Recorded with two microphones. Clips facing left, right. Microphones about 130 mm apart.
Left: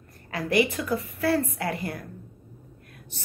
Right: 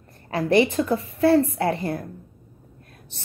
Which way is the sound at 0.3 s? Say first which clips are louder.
Right 5 dB; 30° right (ahead or behind).